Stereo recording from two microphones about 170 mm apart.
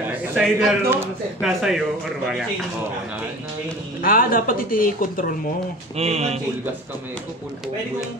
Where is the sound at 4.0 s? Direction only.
55° left (ahead or behind).